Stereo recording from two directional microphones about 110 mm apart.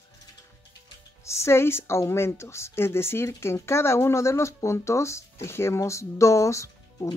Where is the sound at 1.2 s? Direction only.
25° left (ahead or behind).